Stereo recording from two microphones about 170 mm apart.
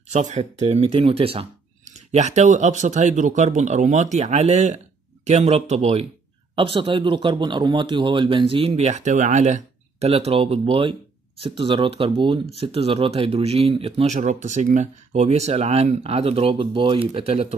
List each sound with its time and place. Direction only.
0.1 s speech: 45° right (ahead or behind)